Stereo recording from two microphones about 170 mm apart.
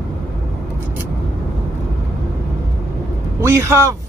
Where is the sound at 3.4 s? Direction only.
15° right (ahead or behind).